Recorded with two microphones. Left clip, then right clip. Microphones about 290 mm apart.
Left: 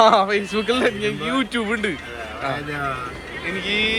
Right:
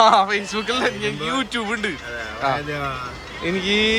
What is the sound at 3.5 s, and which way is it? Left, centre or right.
Speech, right.